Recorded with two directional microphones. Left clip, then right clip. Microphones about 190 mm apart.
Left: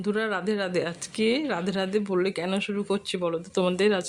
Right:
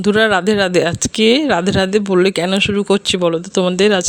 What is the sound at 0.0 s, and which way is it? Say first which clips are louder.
Speech: right 14 dB; 45° right (ahead or behind).